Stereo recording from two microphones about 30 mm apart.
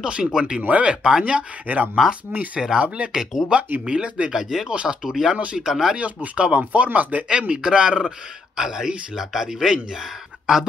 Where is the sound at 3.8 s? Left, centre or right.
Right.